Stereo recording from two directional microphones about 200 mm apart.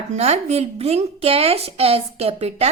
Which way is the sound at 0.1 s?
35° right (ahead or behind).